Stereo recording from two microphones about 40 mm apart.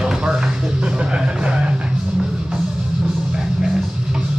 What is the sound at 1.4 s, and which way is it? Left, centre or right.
Music, right.